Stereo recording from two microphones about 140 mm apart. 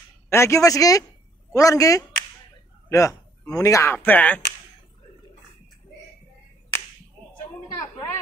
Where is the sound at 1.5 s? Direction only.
25° left (ahead or behind).